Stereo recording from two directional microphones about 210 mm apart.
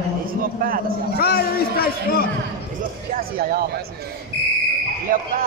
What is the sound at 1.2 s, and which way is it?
A man's voice, 45° left (ahead or behind).